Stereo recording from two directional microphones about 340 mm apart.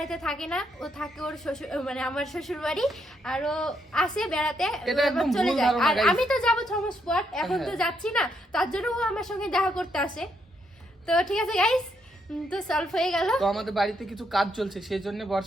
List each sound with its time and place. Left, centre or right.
0.0 s a woman's voice: centre